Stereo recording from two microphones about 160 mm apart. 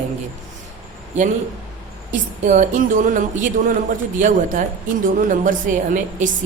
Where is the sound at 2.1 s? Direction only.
55° right (ahead or behind).